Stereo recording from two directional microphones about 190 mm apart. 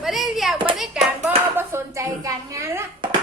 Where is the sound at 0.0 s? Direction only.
Centre (ahead or behind).